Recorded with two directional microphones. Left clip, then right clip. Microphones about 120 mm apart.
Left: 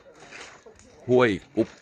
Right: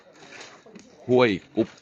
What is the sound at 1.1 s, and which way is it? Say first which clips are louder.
Speech: right 1 dB; 25° left (ahead or behind).